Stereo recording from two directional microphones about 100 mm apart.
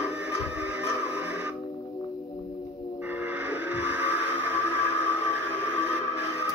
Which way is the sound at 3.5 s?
20° right (ahead or behind).